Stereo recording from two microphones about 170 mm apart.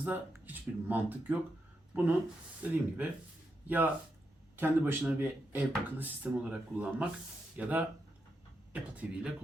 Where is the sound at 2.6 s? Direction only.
10° right (ahead or behind).